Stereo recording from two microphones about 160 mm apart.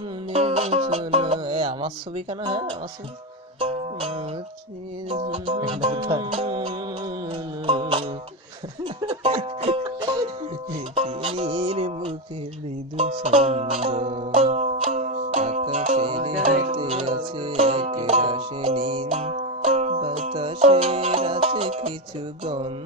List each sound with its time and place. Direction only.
0.3 s speech: 40° right (ahead or behind)
3.5 s music: 35° right (ahead or behind)